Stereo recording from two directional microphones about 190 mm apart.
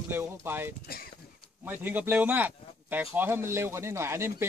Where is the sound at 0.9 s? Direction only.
55° left (ahead or behind).